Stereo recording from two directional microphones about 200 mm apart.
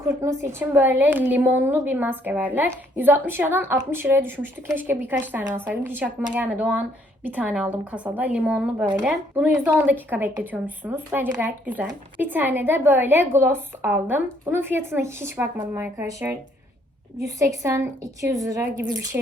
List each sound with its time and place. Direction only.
0.0 s a woman's voice: 15° right (ahead or behind)